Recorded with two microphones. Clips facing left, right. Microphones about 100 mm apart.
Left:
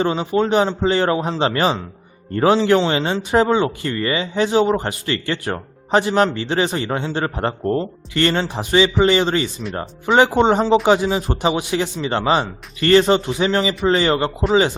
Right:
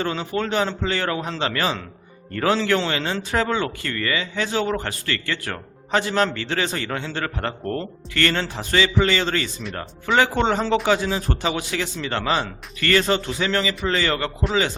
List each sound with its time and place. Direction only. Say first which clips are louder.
0.0 s speech: left 6 dB; 20° left (ahead or behind)